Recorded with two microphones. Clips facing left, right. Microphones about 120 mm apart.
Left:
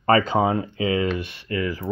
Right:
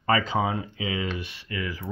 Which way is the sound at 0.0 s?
50° left (ahead or behind).